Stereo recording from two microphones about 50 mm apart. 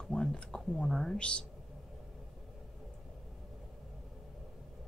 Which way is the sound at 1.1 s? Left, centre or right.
Centre.